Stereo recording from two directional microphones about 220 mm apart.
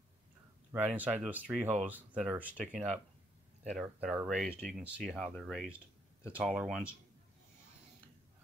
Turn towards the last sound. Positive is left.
turn(degrees=-5)  # may be behind; listen again after turning